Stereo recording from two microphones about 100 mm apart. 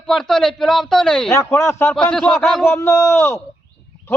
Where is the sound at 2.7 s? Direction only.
25° left (ahead or behind).